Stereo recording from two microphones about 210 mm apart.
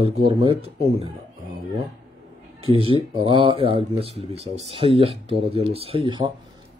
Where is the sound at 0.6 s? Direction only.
25° right (ahead or behind).